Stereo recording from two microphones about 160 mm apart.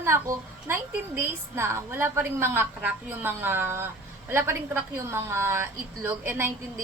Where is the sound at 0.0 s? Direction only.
15° right (ahead or behind).